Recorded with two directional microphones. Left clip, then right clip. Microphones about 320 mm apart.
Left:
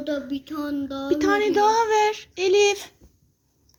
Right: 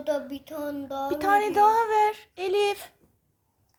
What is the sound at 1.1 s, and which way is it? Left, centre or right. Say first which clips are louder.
A woman's voice: left 2 dB; centre.